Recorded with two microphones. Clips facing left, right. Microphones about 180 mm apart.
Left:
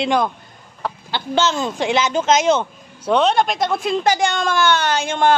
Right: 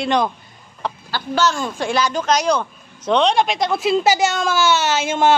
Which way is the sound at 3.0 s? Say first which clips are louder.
Even; 5° left (ahead or behind).